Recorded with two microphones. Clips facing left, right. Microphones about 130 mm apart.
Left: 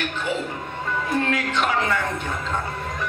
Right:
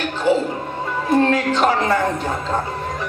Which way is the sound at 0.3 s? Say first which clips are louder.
Right 11 dB; 35° right (ahead or behind).